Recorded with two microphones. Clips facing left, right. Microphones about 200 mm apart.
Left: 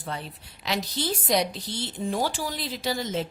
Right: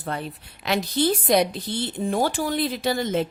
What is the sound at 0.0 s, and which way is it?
A woman's voice, 55° right (ahead or behind).